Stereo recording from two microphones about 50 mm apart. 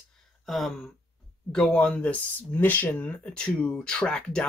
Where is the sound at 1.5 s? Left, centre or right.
Centre.